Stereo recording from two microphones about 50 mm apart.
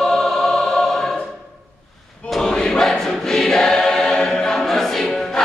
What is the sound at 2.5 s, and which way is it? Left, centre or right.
Choir, centre.